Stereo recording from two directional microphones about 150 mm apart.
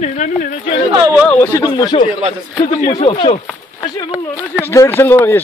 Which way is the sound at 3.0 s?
40° left (ahead or behind).